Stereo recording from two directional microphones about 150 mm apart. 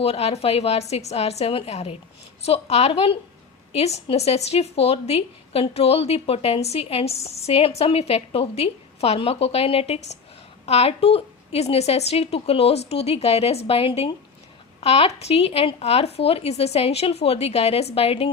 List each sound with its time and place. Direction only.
0.0 s a woman's voice: 40° left (ahead or behind)